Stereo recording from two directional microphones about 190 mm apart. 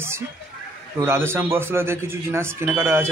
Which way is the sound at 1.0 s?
15° right (ahead or behind).